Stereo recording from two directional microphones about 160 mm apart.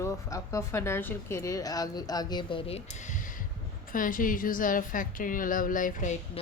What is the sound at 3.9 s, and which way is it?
A woman's voice, 60° left (ahead or behind).